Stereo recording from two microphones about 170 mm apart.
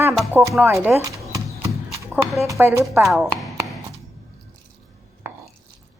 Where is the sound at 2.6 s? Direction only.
15° right (ahead or behind).